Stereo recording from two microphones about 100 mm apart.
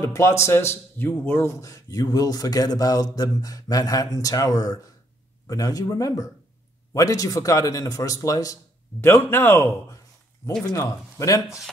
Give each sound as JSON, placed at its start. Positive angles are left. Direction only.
{"t": 0.0, "sound": "a man's voice", "side_deg": 30}
{"t": 11.4, "sound": "speech", "side_deg": -5}